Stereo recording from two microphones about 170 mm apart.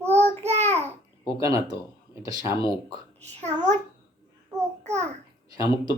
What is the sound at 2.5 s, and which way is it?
Speech, 30° left (ahead or behind).